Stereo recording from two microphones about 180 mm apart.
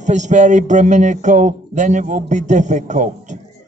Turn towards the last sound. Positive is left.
turn(degrees=-45)  # may be behind; listen again after turning